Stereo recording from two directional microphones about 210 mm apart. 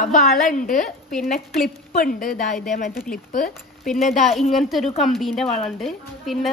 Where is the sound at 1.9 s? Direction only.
40° left (ahead or behind).